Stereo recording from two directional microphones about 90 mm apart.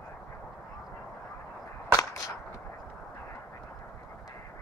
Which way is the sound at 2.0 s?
40° left (ahead or behind).